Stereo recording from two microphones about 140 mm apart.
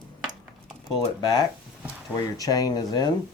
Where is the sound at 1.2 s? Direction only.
30° left (ahead or behind).